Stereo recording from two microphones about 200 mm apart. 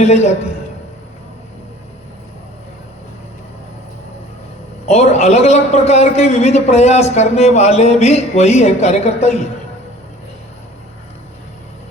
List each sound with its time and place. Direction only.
0.0 s a man's voice: 35° left (ahead or behind)
4.9 s a man's voice: 35° left (ahead or behind)